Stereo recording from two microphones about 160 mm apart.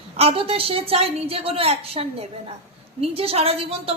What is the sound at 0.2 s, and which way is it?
A woman's voice, 35° right (ahead or behind).